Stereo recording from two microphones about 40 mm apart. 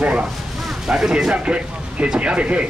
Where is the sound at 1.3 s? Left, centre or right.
Right.